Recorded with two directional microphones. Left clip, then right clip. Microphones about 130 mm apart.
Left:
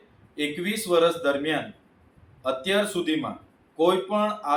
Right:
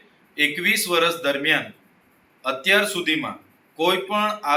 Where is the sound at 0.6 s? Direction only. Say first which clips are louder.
Even; 15° left (ahead or behind).